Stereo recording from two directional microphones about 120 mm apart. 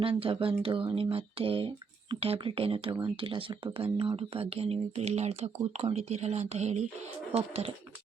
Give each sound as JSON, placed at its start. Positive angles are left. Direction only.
{"t": 0.0, "sound": "speech", "side_deg": -50}
{"t": 7.3, "sound": "speech", "side_deg": -55}